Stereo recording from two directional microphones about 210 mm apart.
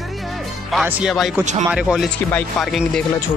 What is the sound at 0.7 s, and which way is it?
Speech, centre (ahead or behind).